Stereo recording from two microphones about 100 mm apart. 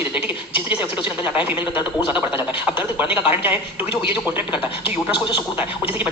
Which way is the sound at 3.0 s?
15° right (ahead or behind).